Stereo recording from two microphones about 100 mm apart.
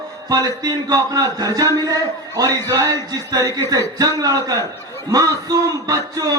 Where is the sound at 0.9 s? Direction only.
35° right (ahead or behind).